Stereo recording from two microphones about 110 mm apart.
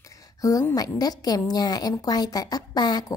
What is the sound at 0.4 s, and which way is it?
A woman's voice, 30° left (ahead or behind).